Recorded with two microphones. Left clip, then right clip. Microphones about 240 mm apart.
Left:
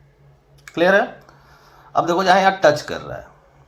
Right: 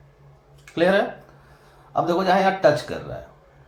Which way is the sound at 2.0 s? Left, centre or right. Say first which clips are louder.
Left 4 dB; left.